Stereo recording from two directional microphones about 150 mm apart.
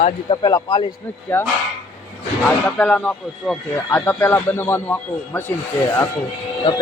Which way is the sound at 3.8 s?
15° left (ahead or behind).